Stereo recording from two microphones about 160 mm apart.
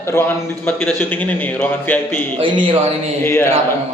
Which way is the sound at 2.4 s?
30° right (ahead or behind).